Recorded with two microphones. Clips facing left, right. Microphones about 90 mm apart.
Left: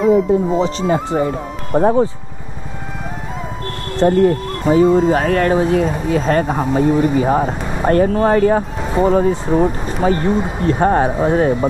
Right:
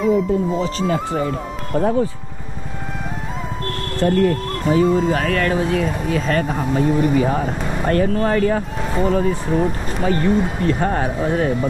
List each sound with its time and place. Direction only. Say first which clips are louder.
0.0 s speech: left 4 dB; centre (ahead or behind)
0.6 s speech: left 4 dB; 30° left (ahead or behind)
0.9 s speech: left 4 dB; 40° left (ahead or behind)
4.0 s speech: left 4 dB; 25° left (ahead or behind)